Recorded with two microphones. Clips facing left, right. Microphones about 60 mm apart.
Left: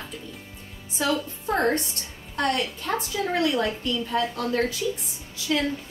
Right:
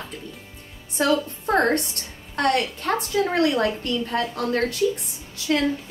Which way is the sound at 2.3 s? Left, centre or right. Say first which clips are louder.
Right 4 dB; right.